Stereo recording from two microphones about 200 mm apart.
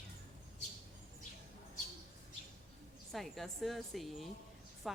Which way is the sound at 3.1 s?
Centre (ahead or behind).